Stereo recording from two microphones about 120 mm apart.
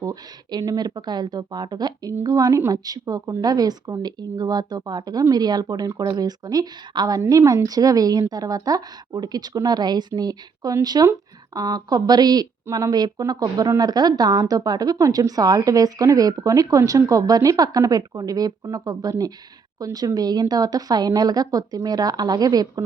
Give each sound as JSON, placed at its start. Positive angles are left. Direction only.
{"t": 0.0, "sound": "speech", "side_deg": -30}